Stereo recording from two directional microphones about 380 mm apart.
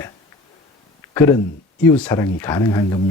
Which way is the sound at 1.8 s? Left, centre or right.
Centre.